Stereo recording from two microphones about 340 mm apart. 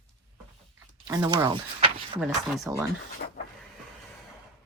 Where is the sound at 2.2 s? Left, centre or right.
Centre.